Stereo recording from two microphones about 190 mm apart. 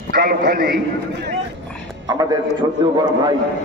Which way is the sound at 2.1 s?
20° right (ahead or behind).